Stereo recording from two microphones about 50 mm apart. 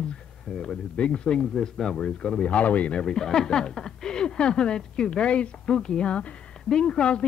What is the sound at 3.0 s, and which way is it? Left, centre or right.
A woman's voice, centre.